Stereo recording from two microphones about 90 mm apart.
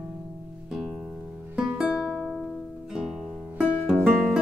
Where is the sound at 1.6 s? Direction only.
10° right (ahead or behind).